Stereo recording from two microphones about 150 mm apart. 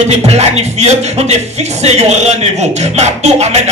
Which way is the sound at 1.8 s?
45° right (ahead or behind).